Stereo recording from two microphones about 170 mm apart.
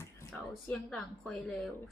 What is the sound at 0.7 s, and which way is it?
Speech, 5° left (ahead or behind).